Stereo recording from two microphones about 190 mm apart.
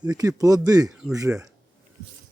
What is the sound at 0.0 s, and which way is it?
Speech, 20° right (ahead or behind).